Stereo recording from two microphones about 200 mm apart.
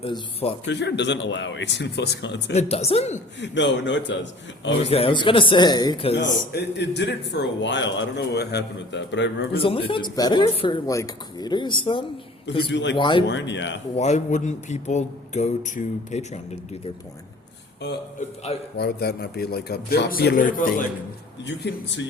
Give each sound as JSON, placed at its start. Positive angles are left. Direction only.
{"t": 0.0, "sound": "speech", "side_deg": 30}
{"t": 0.7, "sound": "a man's voice", "side_deg": 60}
{"t": 2.5, "sound": "speech", "side_deg": 30}
{"t": 3.4, "sound": "a man's voice", "side_deg": 65}
{"t": 4.8, "sound": "speech", "side_deg": 30}
{"t": 6.2, "sound": "a man's voice", "side_deg": 55}
{"t": 9.6, "sound": "speech", "side_deg": 25}
{"t": 12.7, "sound": "a man's voice", "side_deg": 60}
{"t": 13.0, "sound": "speech", "side_deg": 25}
{"t": 13.2, "sound": "a man's voice", "side_deg": 65}
{"t": 13.9, "sound": "speech", "side_deg": 35}
{"t": 18.8, "sound": "a man's voice", "side_deg": 55}
{"t": 21.4, "sound": "a man's voice", "side_deg": 60}